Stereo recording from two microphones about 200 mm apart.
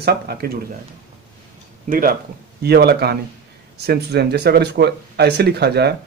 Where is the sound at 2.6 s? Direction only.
55° right (ahead or behind).